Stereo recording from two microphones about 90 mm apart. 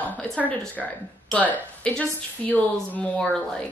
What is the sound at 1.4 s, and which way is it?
A woman's voice, 15° left (ahead or behind).